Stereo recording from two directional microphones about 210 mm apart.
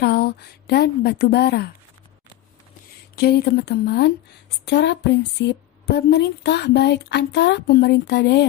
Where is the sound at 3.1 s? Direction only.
50° left (ahead or behind).